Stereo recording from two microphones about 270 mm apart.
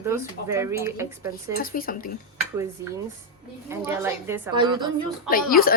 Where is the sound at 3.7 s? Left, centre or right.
Centre.